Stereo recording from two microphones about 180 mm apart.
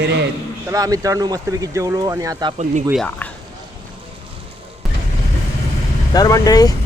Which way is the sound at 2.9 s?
5° left (ahead or behind).